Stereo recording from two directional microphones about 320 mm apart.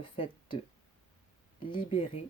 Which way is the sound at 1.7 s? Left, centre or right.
Centre.